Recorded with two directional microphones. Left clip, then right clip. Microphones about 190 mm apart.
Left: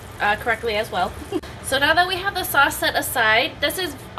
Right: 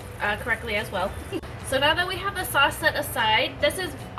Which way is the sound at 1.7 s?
50° left (ahead or behind).